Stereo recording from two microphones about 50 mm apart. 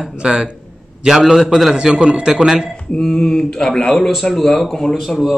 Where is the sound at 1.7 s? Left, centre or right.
Centre.